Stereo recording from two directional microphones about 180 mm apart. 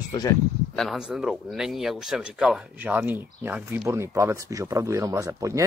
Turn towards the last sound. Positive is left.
turn(degrees=-15)  # may be behind; listen again after turning